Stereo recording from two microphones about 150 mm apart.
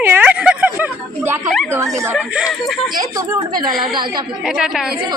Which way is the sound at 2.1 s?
5° right (ahead or behind).